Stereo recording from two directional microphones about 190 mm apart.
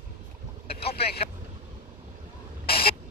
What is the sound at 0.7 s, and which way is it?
Boat, 55° left (ahead or behind).